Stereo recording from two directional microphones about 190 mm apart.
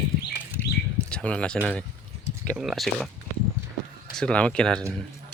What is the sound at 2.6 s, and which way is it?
Speech, centre (ahead or behind).